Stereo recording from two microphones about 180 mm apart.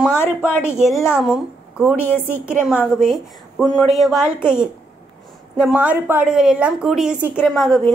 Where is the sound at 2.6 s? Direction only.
5° right (ahead or behind).